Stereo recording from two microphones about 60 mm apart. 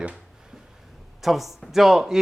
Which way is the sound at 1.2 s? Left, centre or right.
Centre.